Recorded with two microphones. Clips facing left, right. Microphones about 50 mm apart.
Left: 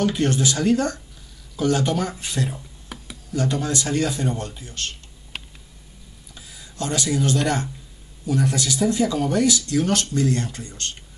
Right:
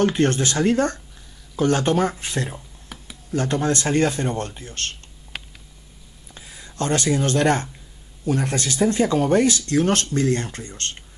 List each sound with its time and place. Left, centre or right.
0.0 s speech: right
2.9 s computer keyboard: centre
3.3 s speech: right
6.3 s speech: right